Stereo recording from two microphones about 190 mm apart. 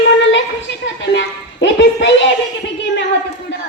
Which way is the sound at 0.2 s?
75° left (ahead or behind).